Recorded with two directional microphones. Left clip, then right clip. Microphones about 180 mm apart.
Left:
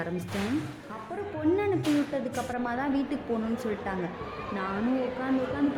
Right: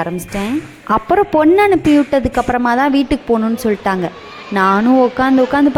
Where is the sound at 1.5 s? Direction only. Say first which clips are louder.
Right 16 dB; 50° right (ahead or behind).